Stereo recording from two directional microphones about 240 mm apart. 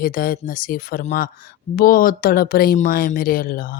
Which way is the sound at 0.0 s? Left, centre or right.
Left.